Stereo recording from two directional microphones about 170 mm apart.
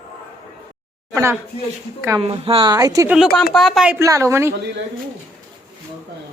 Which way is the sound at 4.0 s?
20° right (ahead or behind).